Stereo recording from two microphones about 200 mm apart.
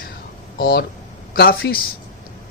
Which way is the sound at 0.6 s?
50° left (ahead or behind).